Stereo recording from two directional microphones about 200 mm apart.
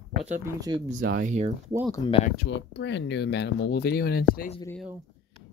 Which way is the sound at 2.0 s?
25° left (ahead or behind).